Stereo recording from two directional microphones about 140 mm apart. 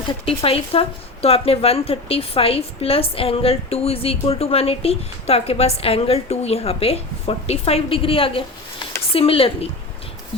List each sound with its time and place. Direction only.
0.1 s speech: 40° left (ahead or behind)